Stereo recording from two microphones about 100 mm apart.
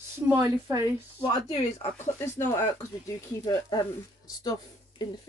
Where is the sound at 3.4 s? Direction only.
40° left (ahead or behind).